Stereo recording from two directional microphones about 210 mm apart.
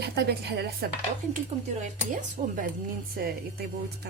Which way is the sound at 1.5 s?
25° right (ahead or behind).